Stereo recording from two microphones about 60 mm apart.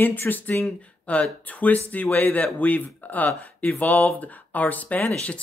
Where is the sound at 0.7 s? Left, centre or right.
Left.